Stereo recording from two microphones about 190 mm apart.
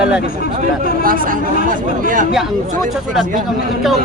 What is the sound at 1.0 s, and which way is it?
Speech, 50° right (ahead or behind).